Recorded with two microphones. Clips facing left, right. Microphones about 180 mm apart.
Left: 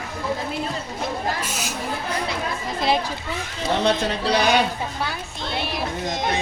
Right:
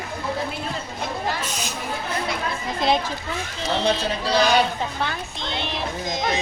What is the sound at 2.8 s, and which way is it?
Speech, 5° left (ahead or behind).